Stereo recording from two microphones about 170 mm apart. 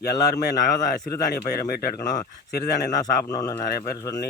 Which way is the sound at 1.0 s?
60° left (ahead or behind).